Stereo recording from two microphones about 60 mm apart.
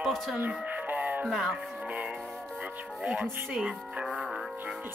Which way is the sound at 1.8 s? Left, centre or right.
Right.